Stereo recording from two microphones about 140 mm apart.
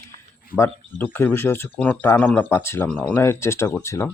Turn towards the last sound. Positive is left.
turn(degrees=20)  # may be behind; listen again after turning